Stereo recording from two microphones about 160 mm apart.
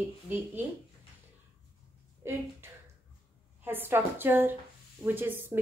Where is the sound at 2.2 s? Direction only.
15° right (ahead or behind).